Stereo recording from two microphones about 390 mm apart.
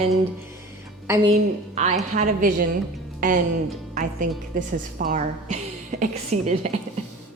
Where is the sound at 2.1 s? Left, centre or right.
Right.